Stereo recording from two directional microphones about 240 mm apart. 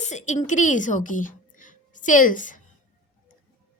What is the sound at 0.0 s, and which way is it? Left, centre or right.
A woman's voice, left.